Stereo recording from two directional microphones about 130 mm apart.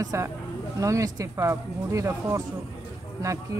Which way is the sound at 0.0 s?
25° right (ahead or behind).